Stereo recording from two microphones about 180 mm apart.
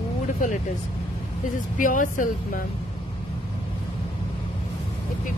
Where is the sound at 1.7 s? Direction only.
45° left (ahead or behind).